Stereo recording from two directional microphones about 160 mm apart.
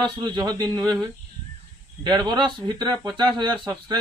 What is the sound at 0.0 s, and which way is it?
Speech, 30° right (ahead or behind).